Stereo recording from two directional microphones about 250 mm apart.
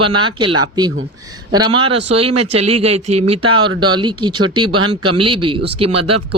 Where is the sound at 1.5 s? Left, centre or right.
Centre.